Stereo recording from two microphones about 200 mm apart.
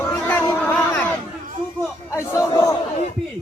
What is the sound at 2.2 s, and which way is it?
Speech, 15° left (ahead or behind).